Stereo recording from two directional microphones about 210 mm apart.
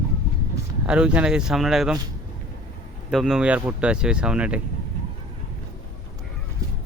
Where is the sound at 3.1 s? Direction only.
Centre (ahead or behind).